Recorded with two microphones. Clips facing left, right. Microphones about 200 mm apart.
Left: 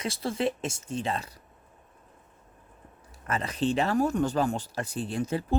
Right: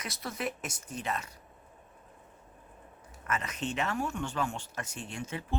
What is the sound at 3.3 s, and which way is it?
Speech, 30° left (ahead or behind).